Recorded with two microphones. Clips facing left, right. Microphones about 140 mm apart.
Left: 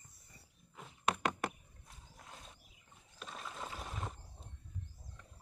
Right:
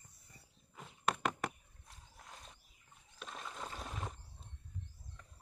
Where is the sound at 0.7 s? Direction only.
Centre (ahead or behind).